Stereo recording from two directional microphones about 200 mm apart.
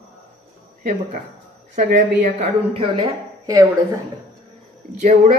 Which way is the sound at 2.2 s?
40° right (ahead or behind).